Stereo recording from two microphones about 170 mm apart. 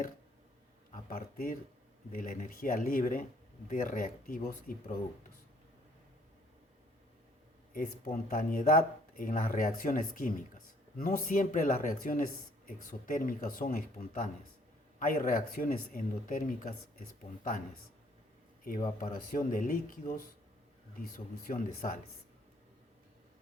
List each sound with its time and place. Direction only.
1.1 s speech: 55° left (ahead or behind)
7.7 s speech: 55° left (ahead or behind)
18.9 s speech: 55° left (ahead or behind)
21.4 s speech: 55° left (ahead or behind)